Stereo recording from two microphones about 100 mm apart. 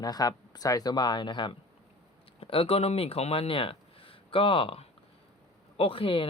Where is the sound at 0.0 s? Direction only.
40° left (ahead or behind).